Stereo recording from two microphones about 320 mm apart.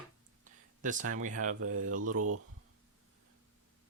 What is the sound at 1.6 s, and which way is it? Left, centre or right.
Speech, right.